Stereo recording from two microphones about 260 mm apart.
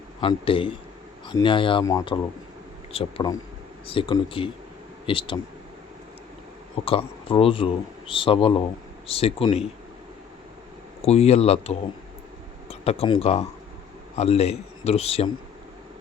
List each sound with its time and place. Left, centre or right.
0.2 s speech: centre
6.8 s speech: left
11.0 s speech: left